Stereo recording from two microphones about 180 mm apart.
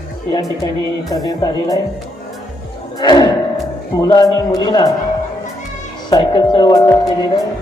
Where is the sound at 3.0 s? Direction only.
25° left (ahead or behind).